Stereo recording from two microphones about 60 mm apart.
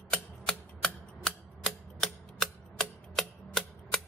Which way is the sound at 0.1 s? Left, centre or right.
Centre.